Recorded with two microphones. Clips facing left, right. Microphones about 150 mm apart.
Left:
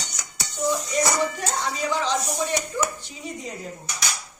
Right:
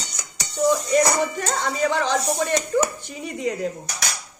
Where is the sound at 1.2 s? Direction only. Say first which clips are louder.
Right 2 dB; 55° right (ahead or behind).